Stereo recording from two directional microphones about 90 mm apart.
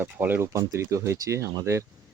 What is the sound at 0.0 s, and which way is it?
Speech, 25° right (ahead or behind).